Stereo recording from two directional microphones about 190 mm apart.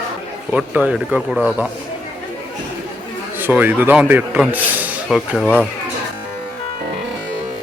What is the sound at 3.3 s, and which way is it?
Speech, 10° right (ahead or behind).